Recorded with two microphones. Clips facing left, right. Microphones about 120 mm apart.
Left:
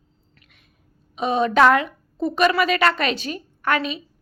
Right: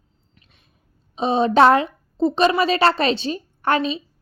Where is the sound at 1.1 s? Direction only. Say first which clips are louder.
Right 2 dB; 30° right (ahead or behind).